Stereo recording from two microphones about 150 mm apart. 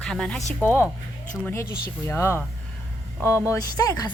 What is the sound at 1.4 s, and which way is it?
Speech, 15° left (ahead or behind).